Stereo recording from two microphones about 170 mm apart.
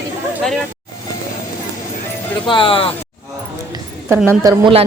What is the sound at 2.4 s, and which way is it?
Speech, 30° left (ahead or behind).